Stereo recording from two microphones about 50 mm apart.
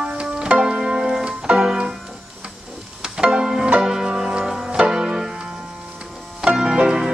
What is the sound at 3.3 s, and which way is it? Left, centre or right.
Music, centre.